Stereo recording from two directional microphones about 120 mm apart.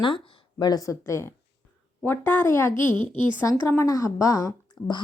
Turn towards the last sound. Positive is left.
turn(degrees=30)  # may be behind; listen again after turning